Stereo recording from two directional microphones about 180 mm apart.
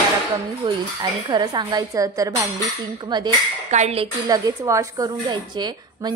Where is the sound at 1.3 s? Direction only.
25° right (ahead or behind).